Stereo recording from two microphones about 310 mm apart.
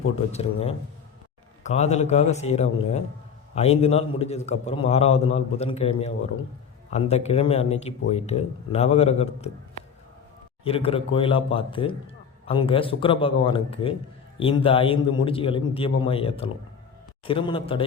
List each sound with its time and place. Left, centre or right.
0.3 s a man's voice: centre
10.6 s a man's voice: centre